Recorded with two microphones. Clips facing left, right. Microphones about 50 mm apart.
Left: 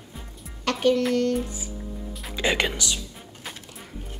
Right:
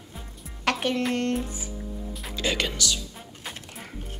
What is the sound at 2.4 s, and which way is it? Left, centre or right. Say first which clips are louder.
Speech: left 3 dB; left.